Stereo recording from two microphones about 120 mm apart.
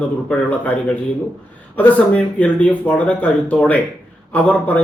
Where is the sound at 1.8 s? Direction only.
10° left (ahead or behind).